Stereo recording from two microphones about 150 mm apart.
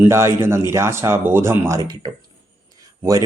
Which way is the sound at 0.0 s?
15° right (ahead or behind).